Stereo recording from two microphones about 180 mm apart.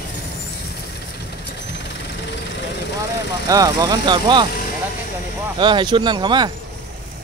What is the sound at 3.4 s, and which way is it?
Speech, 20° right (ahead or behind).